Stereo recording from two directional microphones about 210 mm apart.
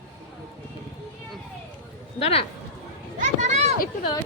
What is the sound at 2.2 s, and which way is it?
Speech, 30° left (ahead or behind).